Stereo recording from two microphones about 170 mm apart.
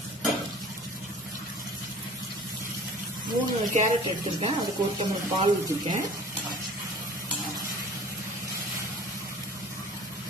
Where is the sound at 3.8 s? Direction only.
35° right (ahead or behind).